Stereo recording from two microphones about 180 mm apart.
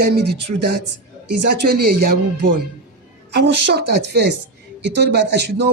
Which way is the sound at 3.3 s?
70° right (ahead or behind).